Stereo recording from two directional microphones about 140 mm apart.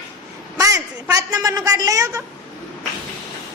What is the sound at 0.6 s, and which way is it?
A woman's voice, 25° right (ahead or behind).